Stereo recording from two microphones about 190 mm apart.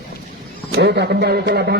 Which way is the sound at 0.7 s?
60° right (ahead or behind).